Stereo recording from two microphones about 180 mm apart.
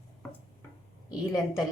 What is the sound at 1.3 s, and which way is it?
Speech, 20° left (ahead or behind).